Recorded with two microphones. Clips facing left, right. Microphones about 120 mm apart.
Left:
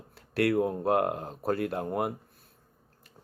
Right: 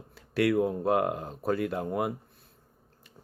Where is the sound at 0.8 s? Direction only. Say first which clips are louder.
Even; 50° left (ahead or behind).